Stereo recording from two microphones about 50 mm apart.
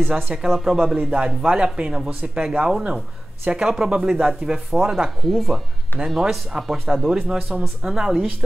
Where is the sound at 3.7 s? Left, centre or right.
Centre.